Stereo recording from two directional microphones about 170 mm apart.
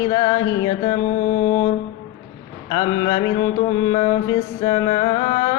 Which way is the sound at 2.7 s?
25° left (ahead or behind).